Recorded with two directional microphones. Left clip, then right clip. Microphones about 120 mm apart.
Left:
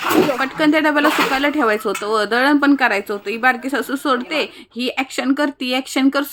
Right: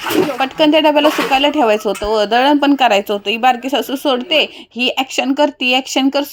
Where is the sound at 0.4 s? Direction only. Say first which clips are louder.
Right 5 dB; 25° left (ahead or behind).